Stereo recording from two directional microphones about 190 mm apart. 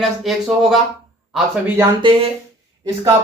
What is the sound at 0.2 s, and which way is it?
Speech, centre (ahead or behind).